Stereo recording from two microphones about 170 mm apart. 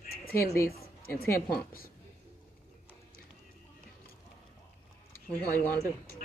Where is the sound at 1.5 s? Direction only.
60° left (ahead or behind).